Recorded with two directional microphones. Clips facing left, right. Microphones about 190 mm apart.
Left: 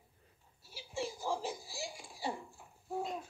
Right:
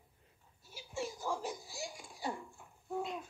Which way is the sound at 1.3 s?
25° left (ahead or behind).